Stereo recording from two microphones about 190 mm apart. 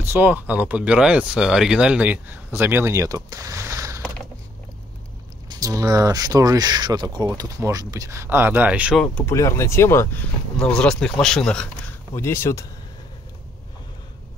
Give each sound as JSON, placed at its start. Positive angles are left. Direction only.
{"t": 0.0, "sound": "speech", "side_deg": -10}
{"t": 5.5, "sound": "speech", "side_deg": -20}
{"t": 9.0, "sound": "speech", "side_deg": 10}